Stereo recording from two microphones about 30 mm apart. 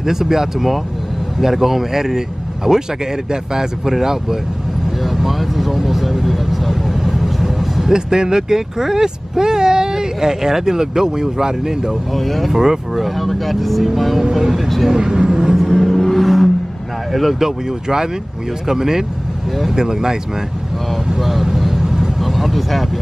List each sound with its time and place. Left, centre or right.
0.0 s speech: centre
5.0 s vehicle: centre
7.9 s speech: right
12.2 s speech: centre
15.8 s vehicle: centre
17.1 s speech: centre
17.4 s speech: centre
21.2 s vehicle: centre